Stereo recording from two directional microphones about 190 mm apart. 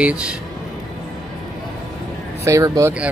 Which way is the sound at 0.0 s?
5° right (ahead or behind).